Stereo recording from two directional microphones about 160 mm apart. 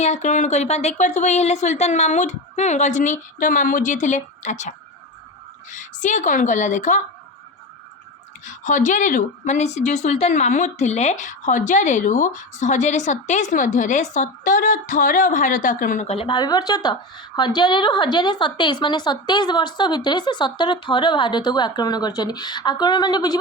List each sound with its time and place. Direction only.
0.0 s a woman's voice: 45° left (ahead or behind)
5.7 s a woman's voice: 50° left (ahead or behind)
8.4 s a woman's voice: 50° left (ahead or behind)
16.0 s a woman's voice: 35° left (ahead or behind)